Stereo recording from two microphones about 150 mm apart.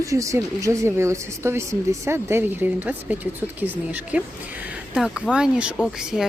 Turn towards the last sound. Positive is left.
turn(degrees=-5)  # may be behind; listen again after turning